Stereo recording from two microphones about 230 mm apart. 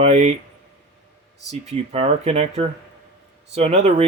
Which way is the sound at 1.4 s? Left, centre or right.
Right.